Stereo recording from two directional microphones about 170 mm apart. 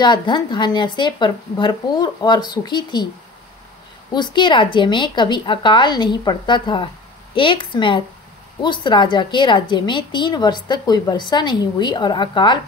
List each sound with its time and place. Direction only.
0.0 s a woman's voice: 25° left (ahead or behind)
4.1 s a woman's voice: 25° left (ahead or behind)